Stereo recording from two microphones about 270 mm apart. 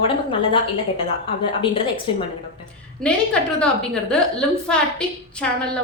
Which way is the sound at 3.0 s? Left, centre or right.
Centre.